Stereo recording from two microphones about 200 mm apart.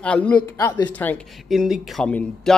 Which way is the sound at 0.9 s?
5° left (ahead or behind).